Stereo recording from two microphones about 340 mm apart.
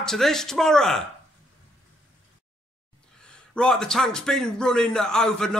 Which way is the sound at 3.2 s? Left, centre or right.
Centre.